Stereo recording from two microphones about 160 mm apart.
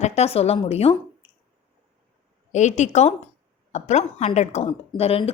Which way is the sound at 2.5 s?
45° left (ahead or behind).